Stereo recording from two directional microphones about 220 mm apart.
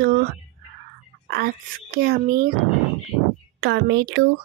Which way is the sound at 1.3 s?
45° right (ahead or behind).